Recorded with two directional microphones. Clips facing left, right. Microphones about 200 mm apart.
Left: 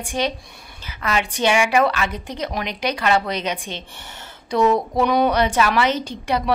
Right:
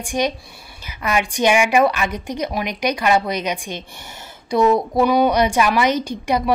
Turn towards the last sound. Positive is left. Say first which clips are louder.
# right 3 dB
turn(degrees=-10)  # may be behind; listen again after turning